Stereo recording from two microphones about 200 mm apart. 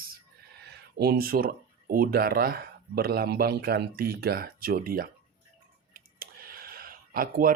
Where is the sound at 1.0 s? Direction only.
50° right (ahead or behind).